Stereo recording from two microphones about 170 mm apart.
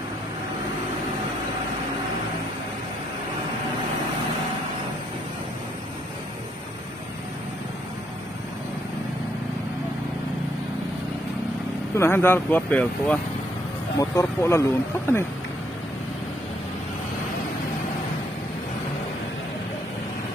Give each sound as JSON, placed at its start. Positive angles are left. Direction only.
{"t": 12.0, "sound": "speech", "side_deg": 15}